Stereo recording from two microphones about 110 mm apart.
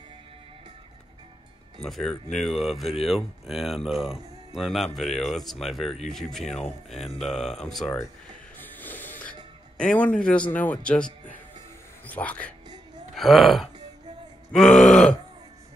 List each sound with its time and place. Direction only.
1.8 s speech: 5° left (ahead or behind)
8.5 s music: 15° left (ahead or behind)
9.8 s speech: 10° left (ahead or behind)
12.1 s speech: 15° left (ahead or behind)
13.1 s speech: centre (ahead or behind)
14.5 s grunt: 5° left (ahead or behind)